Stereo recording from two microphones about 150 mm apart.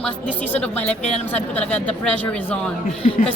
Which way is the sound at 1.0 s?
45° left (ahead or behind).